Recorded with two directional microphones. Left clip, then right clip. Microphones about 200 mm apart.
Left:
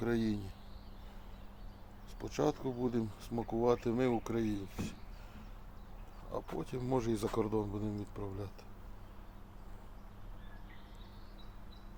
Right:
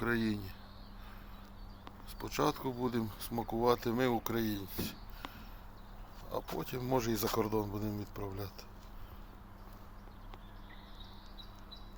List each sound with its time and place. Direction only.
0.0 s speech: centre (ahead or behind)
2.1 s speech: 5° left (ahead or behind)
6.6 s speech: 5° right (ahead or behind)